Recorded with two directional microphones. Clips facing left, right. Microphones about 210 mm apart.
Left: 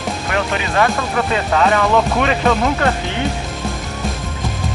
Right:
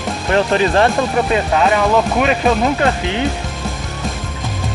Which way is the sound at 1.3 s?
15° right (ahead or behind).